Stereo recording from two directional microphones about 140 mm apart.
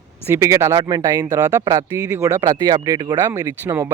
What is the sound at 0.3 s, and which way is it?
Speech, 20° right (ahead or behind).